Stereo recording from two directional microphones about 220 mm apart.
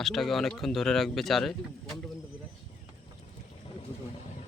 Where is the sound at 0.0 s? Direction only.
Centre (ahead or behind).